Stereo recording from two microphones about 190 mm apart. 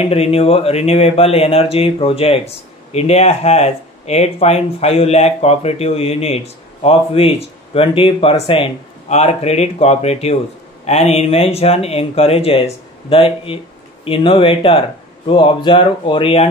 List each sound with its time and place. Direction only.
0.1 s speech: 30° left (ahead or behind)